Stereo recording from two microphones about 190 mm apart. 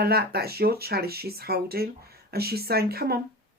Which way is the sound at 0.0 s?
55° right (ahead or behind).